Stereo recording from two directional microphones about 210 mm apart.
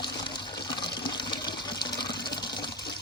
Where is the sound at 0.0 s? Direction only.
20° left (ahead or behind).